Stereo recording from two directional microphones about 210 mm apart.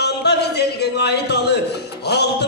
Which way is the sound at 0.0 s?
50° left (ahead or behind).